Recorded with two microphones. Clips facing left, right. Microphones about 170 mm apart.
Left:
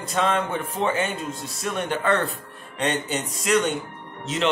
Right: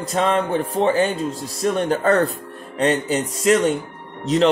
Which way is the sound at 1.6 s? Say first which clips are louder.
Right 6 dB; 35° right (ahead or behind).